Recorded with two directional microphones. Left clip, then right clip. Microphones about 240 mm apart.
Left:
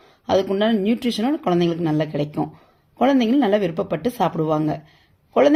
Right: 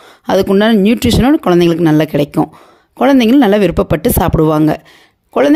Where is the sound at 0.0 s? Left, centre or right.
Right.